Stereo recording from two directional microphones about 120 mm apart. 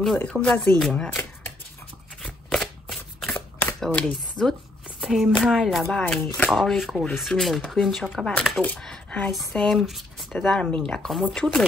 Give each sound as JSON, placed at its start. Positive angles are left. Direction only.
{"t": 0.2, "sound": "speech", "side_deg": 10}
{"t": 2.2, "sound": "shuffling cards", "side_deg": 5}
{"t": 3.3, "sound": "shuffling cards", "side_deg": 15}
{"t": 3.8, "sound": "speech", "side_deg": 5}
{"t": 4.8, "sound": "shuffling cards", "side_deg": -5}
{"t": 5.4, "sound": "speech", "side_deg": -5}
{"t": 8.4, "sound": "speech", "side_deg": 10}